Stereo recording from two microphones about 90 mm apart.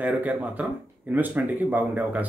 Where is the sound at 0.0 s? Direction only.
15° right (ahead or behind).